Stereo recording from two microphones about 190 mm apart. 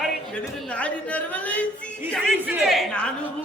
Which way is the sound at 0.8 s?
5° left (ahead or behind).